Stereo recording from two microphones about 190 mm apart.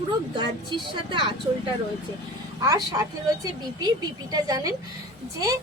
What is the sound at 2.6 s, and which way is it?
Speech, 20° right (ahead or behind).